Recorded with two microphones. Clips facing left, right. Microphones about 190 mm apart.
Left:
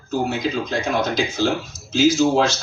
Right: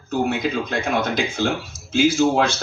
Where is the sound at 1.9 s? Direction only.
55° right (ahead or behind).